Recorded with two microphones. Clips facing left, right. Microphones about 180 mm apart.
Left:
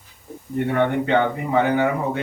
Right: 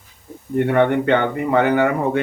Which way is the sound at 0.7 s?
65° right (ahead or behind).